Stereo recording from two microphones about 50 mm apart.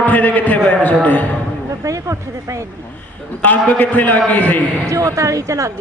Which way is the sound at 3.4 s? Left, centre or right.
Left.